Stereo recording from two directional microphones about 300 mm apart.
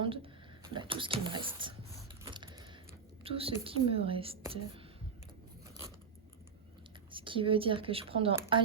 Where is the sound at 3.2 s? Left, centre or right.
Centre.